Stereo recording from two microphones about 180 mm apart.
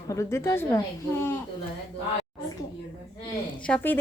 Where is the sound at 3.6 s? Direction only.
10° left (ahead or behind).